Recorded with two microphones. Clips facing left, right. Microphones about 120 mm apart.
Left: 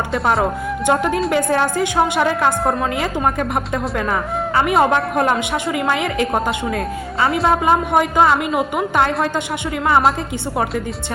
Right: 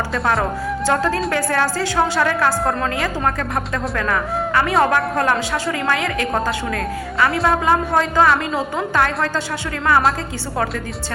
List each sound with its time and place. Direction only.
0.9 s a woman's voice: 20° left (ahead or behind)